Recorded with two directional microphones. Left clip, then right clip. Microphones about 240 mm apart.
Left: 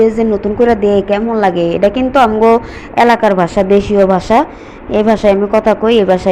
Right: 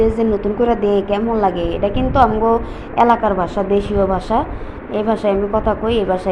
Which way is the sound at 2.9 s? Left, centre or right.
Centre.